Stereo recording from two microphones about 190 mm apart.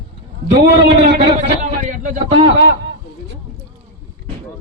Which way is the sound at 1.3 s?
40° right (ahead or behind).